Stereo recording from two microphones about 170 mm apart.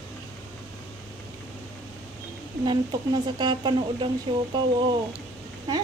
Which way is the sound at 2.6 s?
25° right (ahead or behind).